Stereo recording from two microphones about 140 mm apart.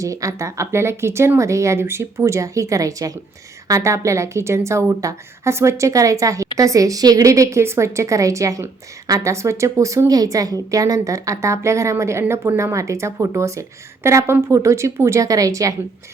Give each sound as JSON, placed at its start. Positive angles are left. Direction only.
{"t": 0.0, "sound": "a woman's voice", "side_deg": -20}